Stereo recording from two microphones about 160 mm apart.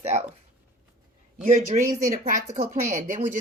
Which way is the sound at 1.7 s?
50° right (ahead or behind).